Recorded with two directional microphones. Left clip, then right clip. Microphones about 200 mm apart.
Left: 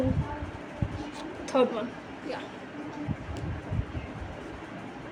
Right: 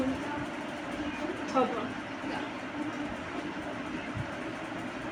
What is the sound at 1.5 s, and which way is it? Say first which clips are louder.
Speech: left 4 dB; 60° left (ahead or behind).